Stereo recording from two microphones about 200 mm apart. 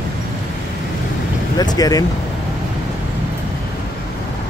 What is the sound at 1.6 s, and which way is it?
Speech, 20° left (ahead or behind).